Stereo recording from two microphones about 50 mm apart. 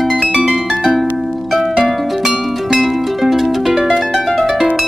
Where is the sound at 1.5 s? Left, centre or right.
Centre.